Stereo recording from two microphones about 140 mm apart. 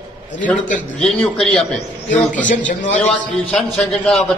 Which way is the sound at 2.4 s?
65° left (ahead or behind).